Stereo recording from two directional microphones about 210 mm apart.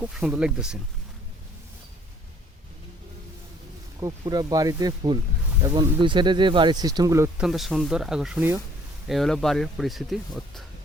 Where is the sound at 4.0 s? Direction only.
15° right (ahead or behind).